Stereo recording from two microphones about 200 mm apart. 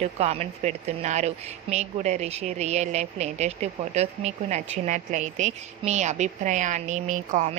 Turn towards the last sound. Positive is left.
turn(degrees=-40)  # may be behind; listen again after turning